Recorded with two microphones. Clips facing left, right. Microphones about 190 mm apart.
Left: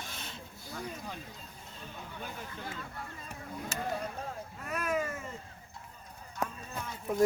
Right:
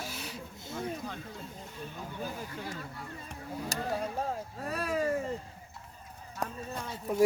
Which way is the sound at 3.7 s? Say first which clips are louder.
Even; 40° right (ahead or behind).